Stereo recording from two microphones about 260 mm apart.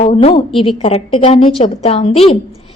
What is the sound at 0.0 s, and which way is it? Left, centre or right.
A woman's voice, left.